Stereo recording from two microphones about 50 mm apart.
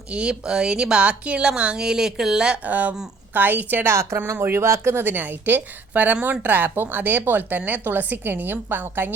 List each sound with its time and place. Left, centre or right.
0.1 s speech: centre
2.6 s a woman's voice: right
3.8 s speech: right
4.4 s speech: right
5.0 s a woman's voice: right